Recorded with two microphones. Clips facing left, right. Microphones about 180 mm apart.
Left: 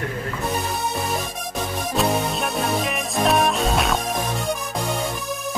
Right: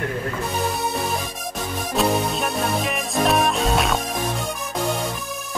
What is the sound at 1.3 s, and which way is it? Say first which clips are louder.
Music: left 1 dB; centre (ahead or behind).